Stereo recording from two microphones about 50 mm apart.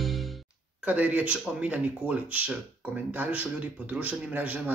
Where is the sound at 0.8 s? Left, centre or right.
Right.